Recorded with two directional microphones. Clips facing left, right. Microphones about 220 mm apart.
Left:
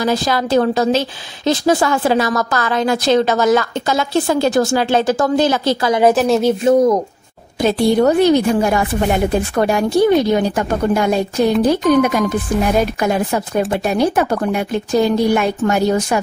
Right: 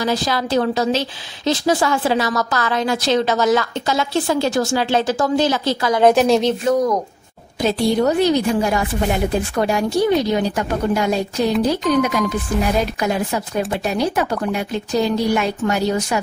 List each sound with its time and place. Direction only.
0.0 s a woman's voice: 50° left (ahead or behind)
5.9 s a woman's voice: 5° left (ahead or behind)
6.6 s speech: 25° left (ahead or behind)
7.6 s a woman's voice: 55° left (ahead or behind)